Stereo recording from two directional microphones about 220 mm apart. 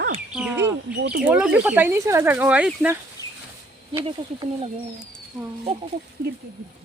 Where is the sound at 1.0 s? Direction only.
45° right (ahead or behind).